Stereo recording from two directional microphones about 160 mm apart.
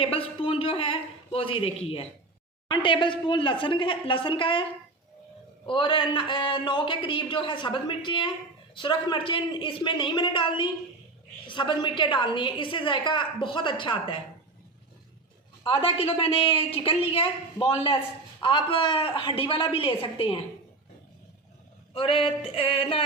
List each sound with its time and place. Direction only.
0.0 s a woman's voice: 35° left (ahead or behind)
5.6 s a woman's voice: 30° left (ahead or behind)
15.6 s a woman's voice: 35° left (ahead or behind)
21.9 s a woman's voice: 35° left (ahead or behind)